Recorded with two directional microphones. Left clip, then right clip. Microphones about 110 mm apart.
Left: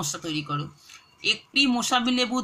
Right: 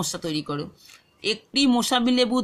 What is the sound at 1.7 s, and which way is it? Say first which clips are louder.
Speech: right 2 dB; 45° right (ahead or behind).